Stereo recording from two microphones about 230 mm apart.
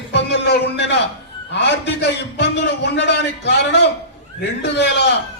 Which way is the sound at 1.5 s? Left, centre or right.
Left.